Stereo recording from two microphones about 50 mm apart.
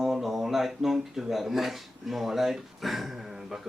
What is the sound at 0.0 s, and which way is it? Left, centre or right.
Speech, centre.